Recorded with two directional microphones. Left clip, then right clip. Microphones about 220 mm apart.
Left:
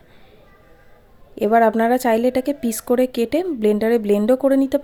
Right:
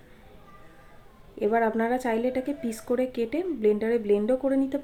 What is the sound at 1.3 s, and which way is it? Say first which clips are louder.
Speech: left 9 dB; 45° left (ahead or behind).